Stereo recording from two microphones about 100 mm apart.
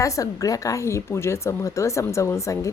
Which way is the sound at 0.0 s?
35° left (ahead or behind).